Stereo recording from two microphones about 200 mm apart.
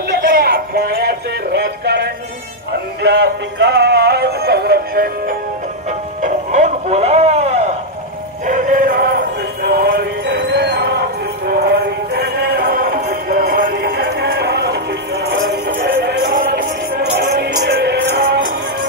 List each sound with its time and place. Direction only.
0.1 s music: 55° right (ahead or behind)
3.0 s synthetic singing: 60° right (ahead or behind)
5.9 s music: 35° right (ahead or behind); by 18.4 s 60° right (ahead or behind)